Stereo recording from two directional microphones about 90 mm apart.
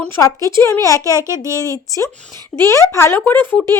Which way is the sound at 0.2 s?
40° left (ahead or behind).